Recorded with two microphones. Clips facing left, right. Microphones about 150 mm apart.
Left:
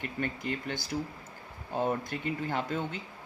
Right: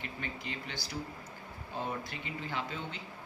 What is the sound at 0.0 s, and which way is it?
Speech, 50° left (ahead or behind).